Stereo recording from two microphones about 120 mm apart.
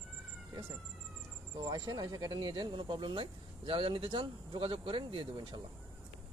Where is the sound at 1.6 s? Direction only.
35° right (ahead or behind).